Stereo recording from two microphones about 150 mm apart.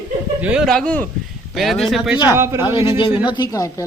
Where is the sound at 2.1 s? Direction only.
30° left (ahead or behind).